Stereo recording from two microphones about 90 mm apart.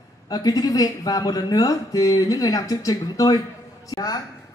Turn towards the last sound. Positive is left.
turn(degrees=45)  # may be behind; listen again after turning